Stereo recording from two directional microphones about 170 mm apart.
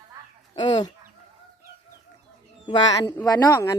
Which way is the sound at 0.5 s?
25° left (ahead or behind).